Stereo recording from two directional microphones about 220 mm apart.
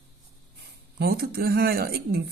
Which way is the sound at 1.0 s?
45° right (ahead or behind).